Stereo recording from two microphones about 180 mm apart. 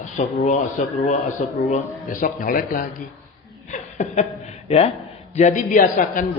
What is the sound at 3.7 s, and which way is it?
Chuckle, 40° left (ahead or behind).